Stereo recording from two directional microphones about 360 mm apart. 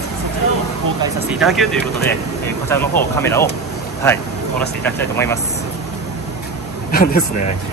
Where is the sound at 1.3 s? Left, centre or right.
Centre.